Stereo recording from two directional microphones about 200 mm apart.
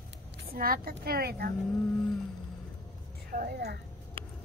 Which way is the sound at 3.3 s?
50° right (ahead or behind).